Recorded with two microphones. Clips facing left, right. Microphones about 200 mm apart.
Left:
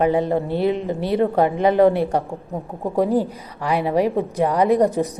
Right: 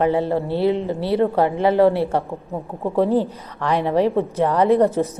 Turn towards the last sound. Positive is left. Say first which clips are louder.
# right 1 dB
turn(degrees=15)  # may be behind; listen again after turning